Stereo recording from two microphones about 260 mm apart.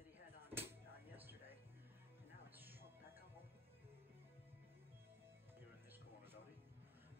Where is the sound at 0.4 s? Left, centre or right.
Centre.